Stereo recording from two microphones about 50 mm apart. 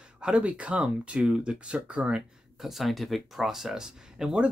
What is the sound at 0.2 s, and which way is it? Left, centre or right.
Speech, right.